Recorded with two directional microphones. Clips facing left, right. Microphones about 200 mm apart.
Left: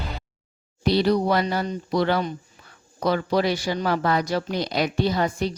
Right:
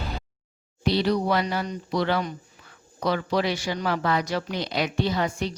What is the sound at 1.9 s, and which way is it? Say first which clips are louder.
Speech: left 3 dB; 40° left (ahead or behind).